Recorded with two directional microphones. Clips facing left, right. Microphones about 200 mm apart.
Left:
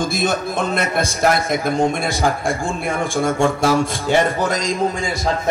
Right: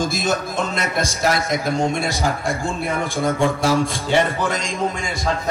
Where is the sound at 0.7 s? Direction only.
55° left (ahead or behind).